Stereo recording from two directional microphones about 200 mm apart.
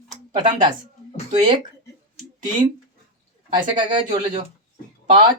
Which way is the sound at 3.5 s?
25° right (ahead or behind).